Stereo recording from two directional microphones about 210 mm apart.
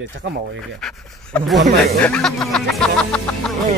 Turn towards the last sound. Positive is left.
turn(degrees=5)  # may be behind; listen again after turning